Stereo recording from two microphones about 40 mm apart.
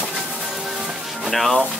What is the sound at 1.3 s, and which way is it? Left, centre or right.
Speech, centre.